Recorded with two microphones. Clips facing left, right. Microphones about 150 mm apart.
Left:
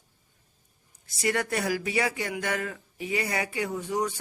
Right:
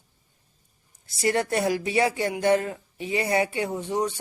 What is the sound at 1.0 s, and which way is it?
Speech, 30° right (ahead or behind).